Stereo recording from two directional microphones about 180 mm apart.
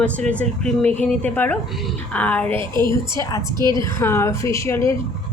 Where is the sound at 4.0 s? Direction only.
15° left (ahead or behind).